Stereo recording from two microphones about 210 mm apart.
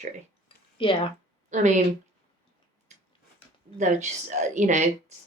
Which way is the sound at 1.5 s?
35° right (ahead or behind).